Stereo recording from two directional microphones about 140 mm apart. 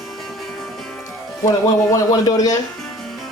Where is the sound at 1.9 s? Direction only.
25° left (ahead or behind).